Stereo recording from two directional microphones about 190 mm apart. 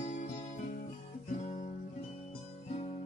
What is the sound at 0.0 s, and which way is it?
Music, 40° left (ahead or behind).